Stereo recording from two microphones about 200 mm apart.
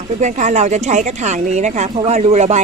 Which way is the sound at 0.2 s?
35° right (ahead or behind).